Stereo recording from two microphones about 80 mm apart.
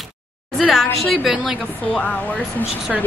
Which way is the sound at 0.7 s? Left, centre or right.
Centre.